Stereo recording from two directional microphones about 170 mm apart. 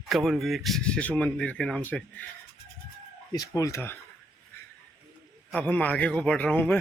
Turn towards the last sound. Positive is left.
turn(degrees=10)  # may be behind; listen again after turning